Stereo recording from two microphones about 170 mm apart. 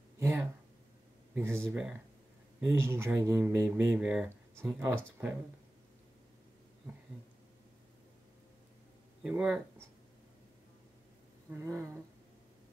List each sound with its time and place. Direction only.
0.2 s a sound: 15° right (ahead or behind)
1.3 s speech: 10° right (ahead or behind)
9.2 s speech: 5° right (ahead or behind)
11.5 s speech: 15° right (ahead or behind)